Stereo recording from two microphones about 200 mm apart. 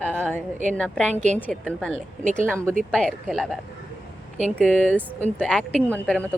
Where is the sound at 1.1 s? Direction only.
35° right (ahead or behind).